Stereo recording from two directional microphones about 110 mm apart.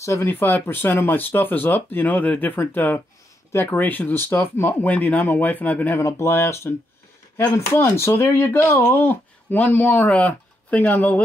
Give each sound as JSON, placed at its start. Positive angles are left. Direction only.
{"t": 0.0, "sound": "speech", "side_deg": 25}
{"t": 5.9, "sound": "speech", "side_deg": 25}